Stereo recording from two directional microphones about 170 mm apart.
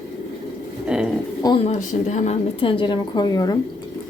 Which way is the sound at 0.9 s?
5° right (ahead or behind).